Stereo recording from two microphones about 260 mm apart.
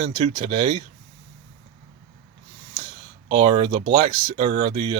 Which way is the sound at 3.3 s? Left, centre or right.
Right.